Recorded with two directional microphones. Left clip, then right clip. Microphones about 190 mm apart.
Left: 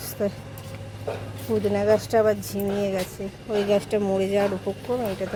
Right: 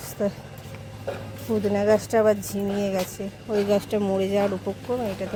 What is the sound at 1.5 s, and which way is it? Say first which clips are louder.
Speech: even; centre (ahead or behind).